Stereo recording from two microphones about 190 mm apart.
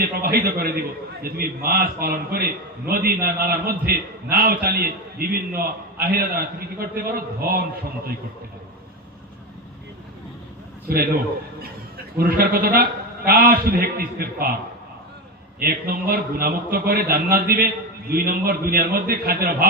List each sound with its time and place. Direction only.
0.0 s a man's voice: 55° right (ahead or behind)
12.1 s a man's voice: 50° right (ahead or behind)
15.5 s a man's voice: 50° right (ahead or behind)